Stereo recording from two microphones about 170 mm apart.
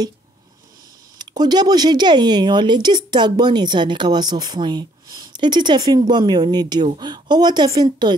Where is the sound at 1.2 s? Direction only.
25° right (ahead or behind).